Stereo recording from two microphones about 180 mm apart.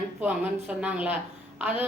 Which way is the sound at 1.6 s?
10° right (ahead or behind).